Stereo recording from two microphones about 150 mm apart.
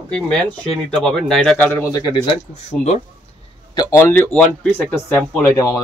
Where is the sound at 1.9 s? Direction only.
25° left (ahead or behind).